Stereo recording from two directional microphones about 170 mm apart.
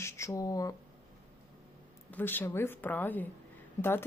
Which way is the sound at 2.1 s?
10° left (ahead or behind).